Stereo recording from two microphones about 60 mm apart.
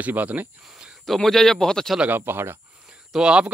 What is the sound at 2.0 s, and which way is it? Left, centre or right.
Speech, right.